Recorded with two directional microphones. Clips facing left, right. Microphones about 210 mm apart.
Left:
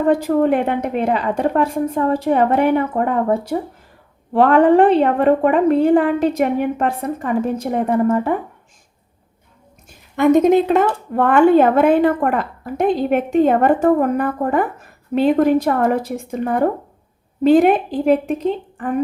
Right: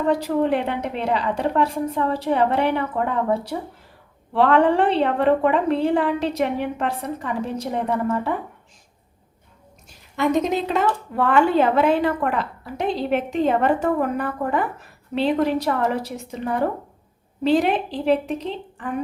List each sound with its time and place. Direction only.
0.1 s a woman's voice: 50° left (ahead or behind)
10.2 s a woman's voice: 55° left (ahead or behind)